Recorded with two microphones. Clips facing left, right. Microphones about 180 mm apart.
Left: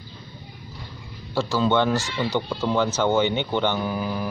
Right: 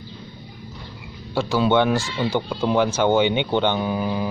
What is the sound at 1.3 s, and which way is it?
Speech, 15° right (ahead or behind).